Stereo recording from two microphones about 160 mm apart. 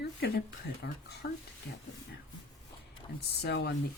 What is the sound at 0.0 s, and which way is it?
Speech, 80° left.